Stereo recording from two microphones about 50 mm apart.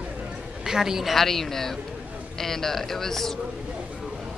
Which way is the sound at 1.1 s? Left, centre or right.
Centre.